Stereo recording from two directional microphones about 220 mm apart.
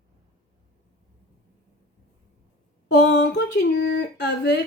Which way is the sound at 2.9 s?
50° left (ahead or behind).